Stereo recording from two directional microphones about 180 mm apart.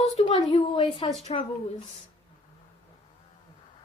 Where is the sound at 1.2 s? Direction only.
35° left (ahead or behind).